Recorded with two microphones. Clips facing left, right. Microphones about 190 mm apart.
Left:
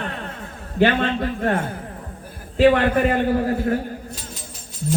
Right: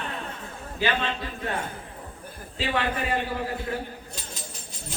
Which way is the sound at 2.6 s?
55° left (ahead or behind).